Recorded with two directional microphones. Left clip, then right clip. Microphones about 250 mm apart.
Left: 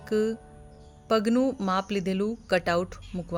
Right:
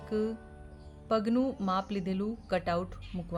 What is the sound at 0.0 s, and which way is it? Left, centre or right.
Music, left.